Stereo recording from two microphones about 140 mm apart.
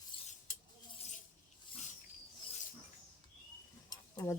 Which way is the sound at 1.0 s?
55° left (ahead or behind).